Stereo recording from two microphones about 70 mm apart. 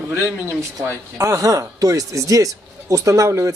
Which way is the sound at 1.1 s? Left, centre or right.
Right.